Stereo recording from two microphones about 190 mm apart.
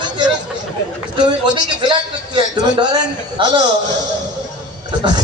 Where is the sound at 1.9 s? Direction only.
25° right (ahead or behind).